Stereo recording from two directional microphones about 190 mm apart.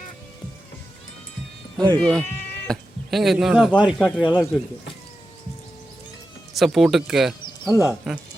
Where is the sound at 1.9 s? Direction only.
5° left (ahead or behind).